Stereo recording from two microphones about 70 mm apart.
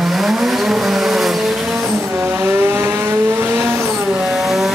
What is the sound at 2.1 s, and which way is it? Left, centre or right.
Vehicle, right.